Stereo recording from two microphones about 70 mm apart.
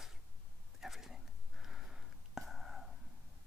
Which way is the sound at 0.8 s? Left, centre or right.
Centre.